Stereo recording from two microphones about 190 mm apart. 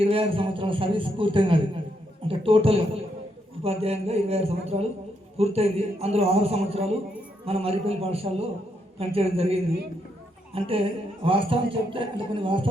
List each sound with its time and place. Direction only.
0.0 s a man's voice: 30° right (ahead or behind)